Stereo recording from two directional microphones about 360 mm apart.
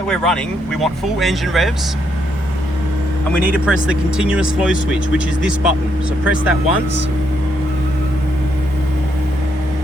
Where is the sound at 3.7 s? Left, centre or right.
Centre.